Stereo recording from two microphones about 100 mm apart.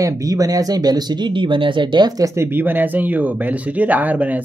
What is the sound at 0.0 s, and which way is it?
Speech, 35° right (ahead or behind).